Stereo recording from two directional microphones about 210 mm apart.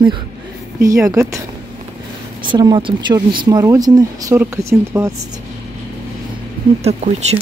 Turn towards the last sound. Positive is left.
turn(degrees=-30)  # may be behind; listen again after turning